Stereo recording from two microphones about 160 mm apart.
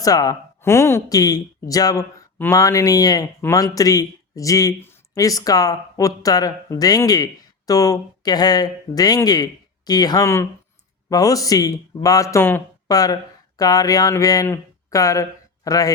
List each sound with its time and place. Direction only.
0.0 s speech: 25° left (ahead or behind)